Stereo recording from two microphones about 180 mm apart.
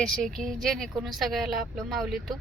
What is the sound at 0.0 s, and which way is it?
Speech, 5° left (ahead or behind).